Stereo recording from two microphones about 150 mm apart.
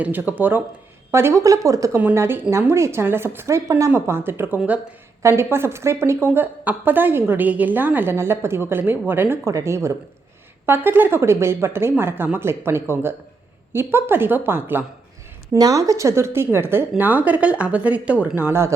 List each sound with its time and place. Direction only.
0.0 s a woman's voice: 10° right (ahead or behind)